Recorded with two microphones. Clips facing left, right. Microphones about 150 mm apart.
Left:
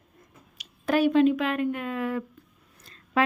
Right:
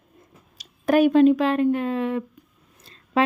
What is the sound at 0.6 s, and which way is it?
A woman's voice, 45° right (ahead or behind).